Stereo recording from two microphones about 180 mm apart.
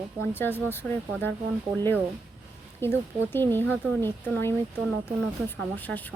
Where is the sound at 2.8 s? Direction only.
10° left (ahead or behind).